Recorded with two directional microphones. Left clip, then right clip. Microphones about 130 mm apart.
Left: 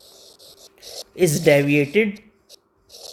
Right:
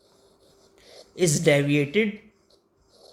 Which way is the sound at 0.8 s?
40° left (ahead or behind).